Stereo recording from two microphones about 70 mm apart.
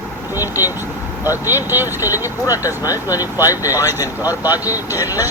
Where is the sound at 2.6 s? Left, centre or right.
Left.